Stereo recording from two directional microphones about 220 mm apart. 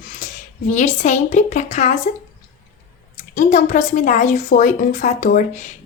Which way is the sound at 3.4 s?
35° left (ahead or behind).